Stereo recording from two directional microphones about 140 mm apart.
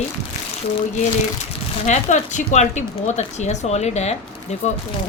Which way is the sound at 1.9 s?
60° left (ahead or behind).